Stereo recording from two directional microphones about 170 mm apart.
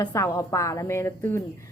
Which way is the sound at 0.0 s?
20° left (ahead or behind).